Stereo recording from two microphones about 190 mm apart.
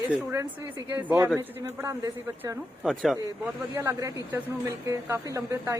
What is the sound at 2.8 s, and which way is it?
Speech, centre (ahead or behind).